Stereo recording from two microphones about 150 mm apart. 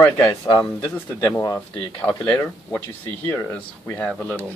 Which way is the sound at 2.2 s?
10° left (ahead or behind).